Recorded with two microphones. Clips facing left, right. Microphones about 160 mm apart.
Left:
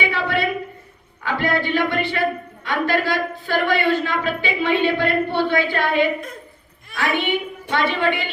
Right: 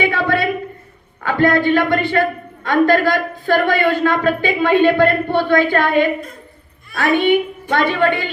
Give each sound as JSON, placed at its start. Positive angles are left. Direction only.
{"t": 0.0, "sound": "a sound", "side_deg": -50}
{"t": 1.2, "sound": "a man's voice", "side_deg": -50}
{"t": 7.7, "sound": "speech", "side_deg": -50}